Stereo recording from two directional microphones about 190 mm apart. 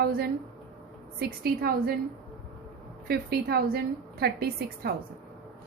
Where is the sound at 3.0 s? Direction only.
55° right (ahead or behind).